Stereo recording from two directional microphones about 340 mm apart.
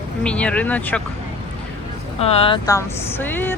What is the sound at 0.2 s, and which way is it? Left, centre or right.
Speech, centre.